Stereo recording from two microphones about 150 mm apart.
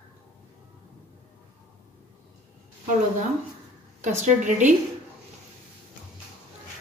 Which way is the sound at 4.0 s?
50° right (ahead or behind).